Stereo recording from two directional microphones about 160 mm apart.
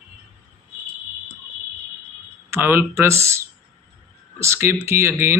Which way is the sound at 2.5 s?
15° right (ahead or behind).